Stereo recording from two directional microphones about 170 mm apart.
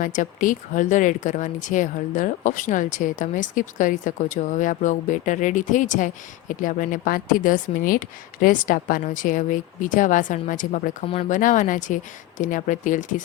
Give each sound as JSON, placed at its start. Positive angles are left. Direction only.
{"t": 0.0, "sound": "speech", "side_deg": 50}